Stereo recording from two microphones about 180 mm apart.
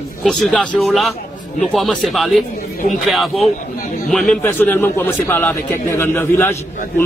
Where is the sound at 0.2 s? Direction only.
Centre (ahead or behind).